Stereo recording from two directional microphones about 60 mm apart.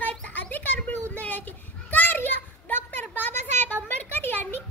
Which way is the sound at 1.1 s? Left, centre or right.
Left.